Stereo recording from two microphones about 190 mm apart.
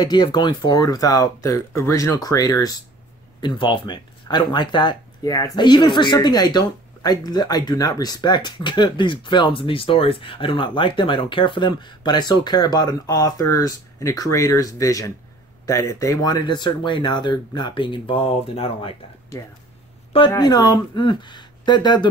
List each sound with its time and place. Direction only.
0.0 s speech: 20° left (ahead or behind)
20.2 s speech: 20° left (ahead or behind)